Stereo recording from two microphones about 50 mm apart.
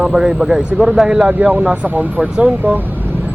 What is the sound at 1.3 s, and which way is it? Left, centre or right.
Speech, right.